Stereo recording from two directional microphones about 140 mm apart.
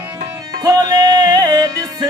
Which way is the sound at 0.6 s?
25° right (ahead or behind).